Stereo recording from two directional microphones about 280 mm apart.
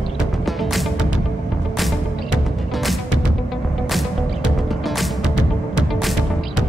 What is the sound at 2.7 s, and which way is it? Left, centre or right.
Music, centre.